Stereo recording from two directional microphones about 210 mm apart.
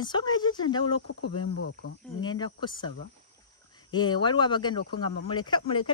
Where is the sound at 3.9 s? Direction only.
20° left (ahead or behind).